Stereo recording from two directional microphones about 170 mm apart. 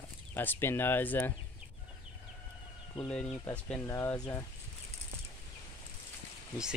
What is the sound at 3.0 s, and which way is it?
Speech, 10° left (ahead or behind).